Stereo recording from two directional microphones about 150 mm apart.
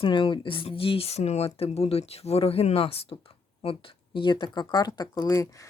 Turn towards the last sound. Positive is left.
turn(degrees=20)  # may be behind; listen again after turning